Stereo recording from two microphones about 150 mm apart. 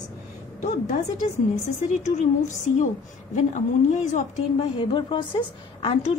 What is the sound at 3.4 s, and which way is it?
Speech, 50° left (ahead or behind).